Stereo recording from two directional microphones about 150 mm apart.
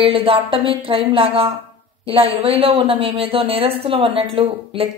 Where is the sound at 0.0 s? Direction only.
40° right (ahead or behind).